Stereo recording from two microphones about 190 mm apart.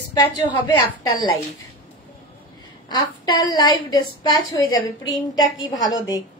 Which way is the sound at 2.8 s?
25° left (ahead or behind).